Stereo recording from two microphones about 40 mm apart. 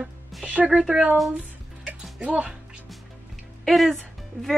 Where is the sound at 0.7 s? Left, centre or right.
Centre.